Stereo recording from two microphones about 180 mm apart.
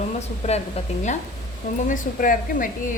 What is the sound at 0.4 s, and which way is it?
Speech, 40° left (ahead or behind).